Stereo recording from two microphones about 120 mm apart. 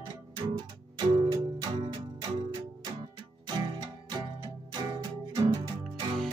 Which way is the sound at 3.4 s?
35° right (ahead or behind).